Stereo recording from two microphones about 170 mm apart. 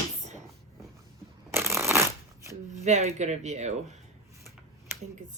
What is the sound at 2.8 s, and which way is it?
Speech, 40° right (ahead or behind).